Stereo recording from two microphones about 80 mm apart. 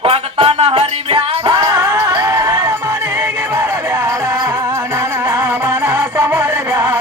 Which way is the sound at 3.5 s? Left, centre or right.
Right.